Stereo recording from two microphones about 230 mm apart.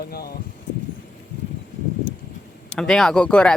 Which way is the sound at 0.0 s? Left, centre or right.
Left.